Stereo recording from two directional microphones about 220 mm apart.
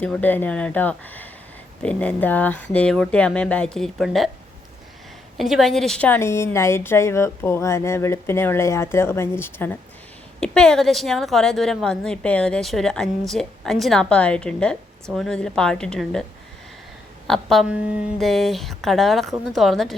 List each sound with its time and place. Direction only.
0.0 s a woman's voice: 5° left (ahead or behind)
5.4 s a woman's voice: centre (ahead or behind)
17.2 s a woman's voice: centre (ahead or behind)